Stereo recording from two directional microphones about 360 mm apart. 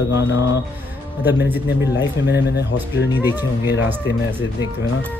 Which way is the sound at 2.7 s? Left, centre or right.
Centre.